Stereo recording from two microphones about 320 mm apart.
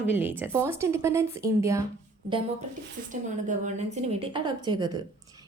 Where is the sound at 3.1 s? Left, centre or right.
Right.